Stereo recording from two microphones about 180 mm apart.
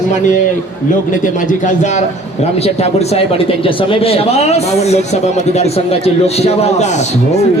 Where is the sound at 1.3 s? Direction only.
45° left (ahead or behind).